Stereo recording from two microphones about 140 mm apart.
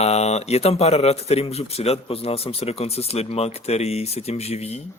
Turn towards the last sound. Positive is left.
turn(degrees=50)  # may be behind; listen again after turning